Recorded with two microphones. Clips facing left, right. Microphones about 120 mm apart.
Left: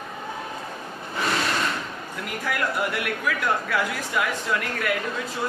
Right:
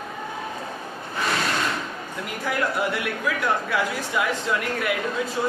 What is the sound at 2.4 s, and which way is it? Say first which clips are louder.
Speech: right 2 dB; 20° right (ahead or behind).